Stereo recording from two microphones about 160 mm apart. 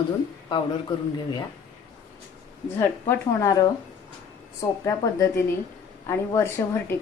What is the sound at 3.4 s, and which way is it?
A woman's voice, 20° left (ahead or behind).